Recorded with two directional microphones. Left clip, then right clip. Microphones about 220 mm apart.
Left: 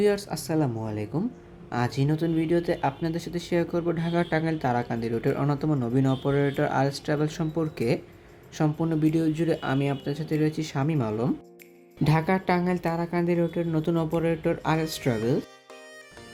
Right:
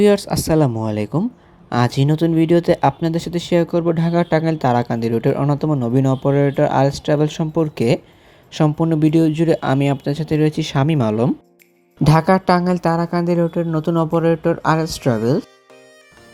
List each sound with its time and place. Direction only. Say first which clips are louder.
0.0 s speech: right 10 dB; 30° right (ahead or behind)